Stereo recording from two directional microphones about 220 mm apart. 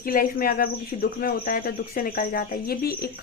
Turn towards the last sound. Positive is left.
turn(degrees=45)  # may be behind; listen again after turning